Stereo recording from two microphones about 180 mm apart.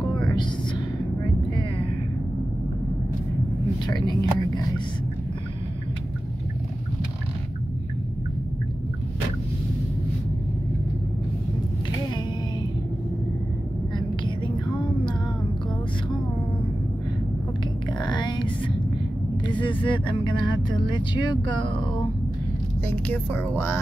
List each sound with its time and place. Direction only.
3.8 s a sound: 25° left (ahead or behind)
17.9 s music: 25° left (ahead or behind)
19.4 s vehicle: 25° left (ahead or behind)
20.9 s speech: 25° left (ahead or behind)
22.8 s speech: 10° left (ahead or behind)